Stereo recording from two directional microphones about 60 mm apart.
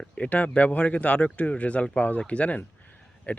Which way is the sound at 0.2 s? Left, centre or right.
Left.